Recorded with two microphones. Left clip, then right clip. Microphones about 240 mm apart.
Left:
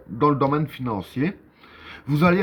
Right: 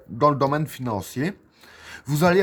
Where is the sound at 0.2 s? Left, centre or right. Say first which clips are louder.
Even; right.